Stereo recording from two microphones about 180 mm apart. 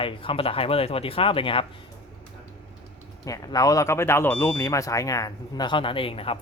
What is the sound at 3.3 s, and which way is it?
Speech, 20° left (ahead or behind).